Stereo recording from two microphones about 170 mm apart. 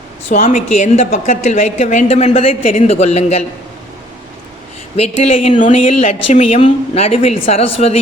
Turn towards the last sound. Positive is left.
turn(degrees=35)  # may be behind; listen again after turning